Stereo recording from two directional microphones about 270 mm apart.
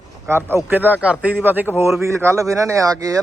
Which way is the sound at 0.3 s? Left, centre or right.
Centre.